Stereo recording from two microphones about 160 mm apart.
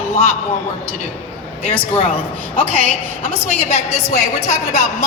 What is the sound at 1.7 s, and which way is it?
Speech, 35° left (ahead or behind).